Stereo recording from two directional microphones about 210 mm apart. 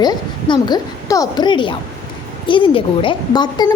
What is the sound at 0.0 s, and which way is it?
A woman's voice, 20° left (ahead or behind).